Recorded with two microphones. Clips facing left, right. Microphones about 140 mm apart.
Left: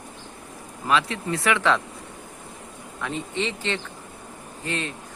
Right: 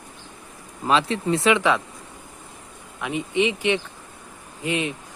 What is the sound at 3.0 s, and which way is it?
Speech, 15° right (ahead or behind).